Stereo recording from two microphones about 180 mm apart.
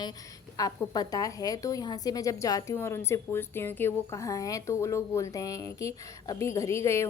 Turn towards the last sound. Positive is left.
turn(degrees=15)  # may be behind; listen again after turning